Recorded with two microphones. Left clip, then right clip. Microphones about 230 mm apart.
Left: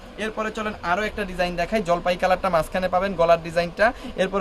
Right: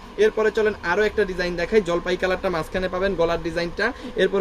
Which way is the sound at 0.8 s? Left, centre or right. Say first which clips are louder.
Right 4 dB; left.